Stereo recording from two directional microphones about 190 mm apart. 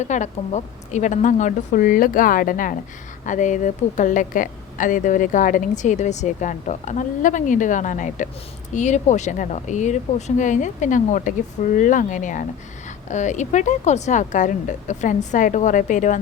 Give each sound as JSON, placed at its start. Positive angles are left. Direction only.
{"t": 0.0, "sound": "a woman's voice", "side_deg": 40}